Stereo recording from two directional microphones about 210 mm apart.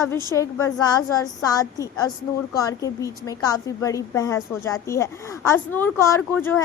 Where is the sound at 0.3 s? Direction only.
15° left (ahead or behind).